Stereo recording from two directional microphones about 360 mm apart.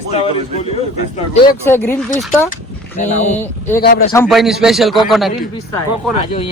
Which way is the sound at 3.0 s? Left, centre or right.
Centre.